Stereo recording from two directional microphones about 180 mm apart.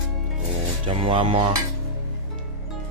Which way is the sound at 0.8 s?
30° right (ahead or behind).